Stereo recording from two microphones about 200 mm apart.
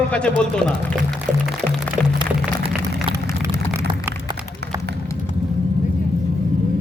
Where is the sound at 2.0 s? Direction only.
Centre (ahead or behind).